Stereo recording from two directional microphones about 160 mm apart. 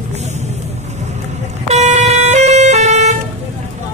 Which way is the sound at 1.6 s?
45° right (ahead or behind).